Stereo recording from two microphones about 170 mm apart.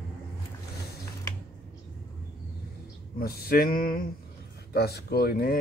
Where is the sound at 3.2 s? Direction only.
65° left (ahead or behind).